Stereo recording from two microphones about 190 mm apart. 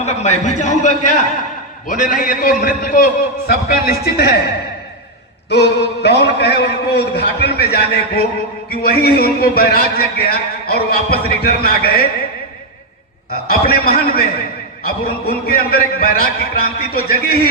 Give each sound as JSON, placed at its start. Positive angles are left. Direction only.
{"t": 0.0, "sound": "a man's voice", "side_deg": 35}
{"t": 5.5, "sound": "a man's voice", "side_deg": 65}
{"t": 13.5, "sound": "a man's voice", "side_deg": 55}